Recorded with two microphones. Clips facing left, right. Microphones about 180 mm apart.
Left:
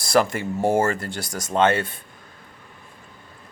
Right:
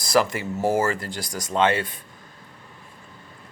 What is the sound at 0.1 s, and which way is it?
Speech, 45° left (ahead or behind).